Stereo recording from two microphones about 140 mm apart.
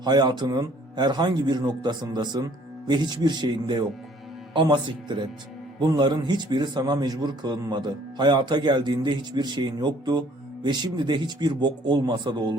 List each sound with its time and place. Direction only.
0.0 s a man's voice: 30° right (ahead or behind)